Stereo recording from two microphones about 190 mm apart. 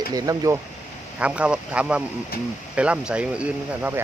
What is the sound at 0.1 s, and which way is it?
Speech, 20° right (ahead or behind).